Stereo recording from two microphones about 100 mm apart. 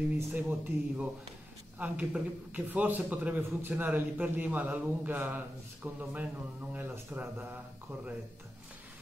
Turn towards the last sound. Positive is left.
turn(degrees=-20)  # may be behind; listen again after turning